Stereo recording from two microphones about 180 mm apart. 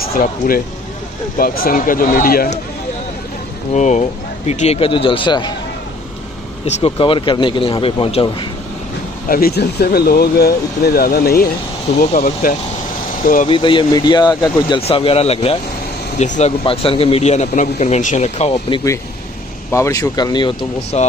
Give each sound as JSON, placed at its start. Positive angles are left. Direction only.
{"t": 0.1, "sound": "speech", "side_deg": 55}
{"t": 3.7, "sound": "speech", "side_deg": 40}
{"t": 6.6, "sound": "speech", "side_deg": 30}
{"t": 9.3, "sound": "speech", "side_deg": 60}
{"t": 13.5, "sound": "speech", "side_deg": 30}
{"t": 19.7, "sound": "speech", "side_deg": 15}